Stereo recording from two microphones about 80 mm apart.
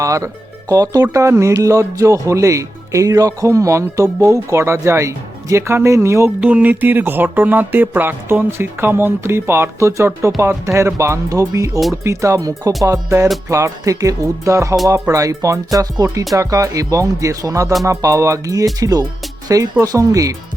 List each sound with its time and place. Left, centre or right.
0.0 s speech: right
1.1 s speech: right
6.4 s speech: centre; by 20.3 s right